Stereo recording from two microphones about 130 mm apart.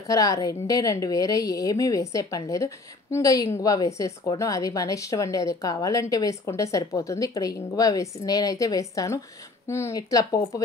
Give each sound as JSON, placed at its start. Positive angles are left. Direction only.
{"t": 0.0, "sound": "a woman's voice", "side_deg": 25}